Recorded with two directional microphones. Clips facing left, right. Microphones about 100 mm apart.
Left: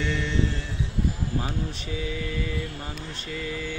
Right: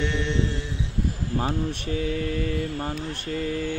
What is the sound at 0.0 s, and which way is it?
Mantra, 20° right (ahead or behind).